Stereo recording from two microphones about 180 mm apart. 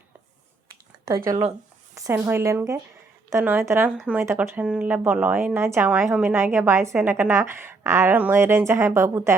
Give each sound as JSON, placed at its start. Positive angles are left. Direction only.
{"t": 1.0, "sound": "a woman's voice", "side_deg": -20}